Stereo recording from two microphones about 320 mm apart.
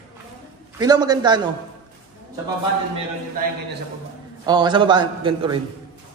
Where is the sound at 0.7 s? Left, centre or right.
Centre.